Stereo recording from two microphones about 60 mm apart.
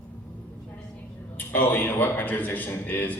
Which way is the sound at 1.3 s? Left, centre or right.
Left.